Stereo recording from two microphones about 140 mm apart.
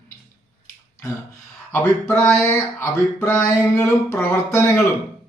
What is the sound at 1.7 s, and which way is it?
A man's voice, 10° left (ahead or behind).